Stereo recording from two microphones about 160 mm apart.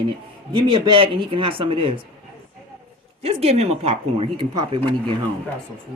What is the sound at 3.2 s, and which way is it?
Speech, 40° right (ahead or behind).